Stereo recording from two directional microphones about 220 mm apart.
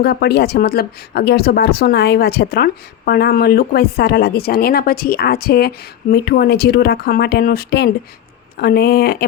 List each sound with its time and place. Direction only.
0.0 s speech: 45° left (ahead or behind)